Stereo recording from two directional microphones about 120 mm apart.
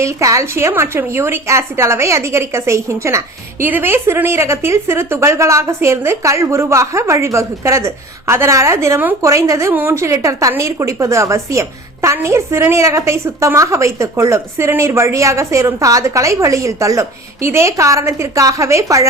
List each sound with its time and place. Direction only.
0.0 s a woman's voice: 25° right (ahead or behind)